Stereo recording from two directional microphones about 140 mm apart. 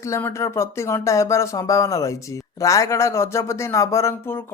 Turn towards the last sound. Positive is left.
turn(degrees=20)  # may be behind; listen again after turning